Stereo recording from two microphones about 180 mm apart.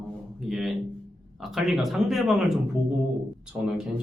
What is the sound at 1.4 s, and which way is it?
Speech, centre (ahead or behind).